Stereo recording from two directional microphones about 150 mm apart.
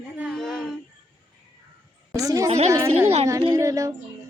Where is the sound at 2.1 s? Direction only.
20° right (ahead or behind).